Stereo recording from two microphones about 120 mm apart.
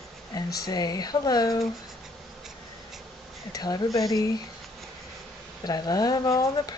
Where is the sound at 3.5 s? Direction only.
35° left (ahead or behind).